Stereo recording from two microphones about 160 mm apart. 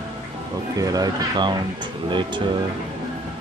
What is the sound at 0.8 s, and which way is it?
Speech, 25° right (ahead or behind).